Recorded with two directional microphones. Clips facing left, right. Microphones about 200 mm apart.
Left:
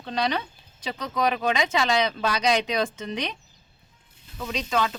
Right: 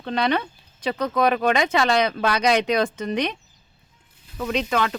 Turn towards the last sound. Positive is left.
turn(degrees=-60)  # may be behind; listen again after turning